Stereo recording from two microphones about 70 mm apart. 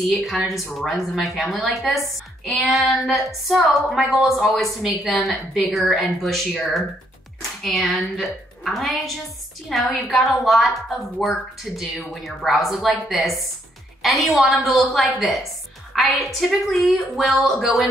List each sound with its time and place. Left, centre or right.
0.1 s a woman's voice: centre